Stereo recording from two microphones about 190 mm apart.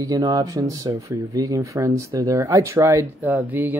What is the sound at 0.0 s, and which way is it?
A woman's voice, 20° right (ahead or behind).